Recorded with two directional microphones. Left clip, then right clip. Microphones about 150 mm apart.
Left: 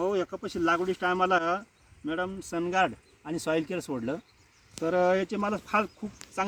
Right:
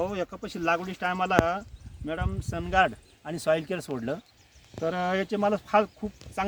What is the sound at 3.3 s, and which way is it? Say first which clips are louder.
Speech: right 3 dB; 15° right (ahead or behind).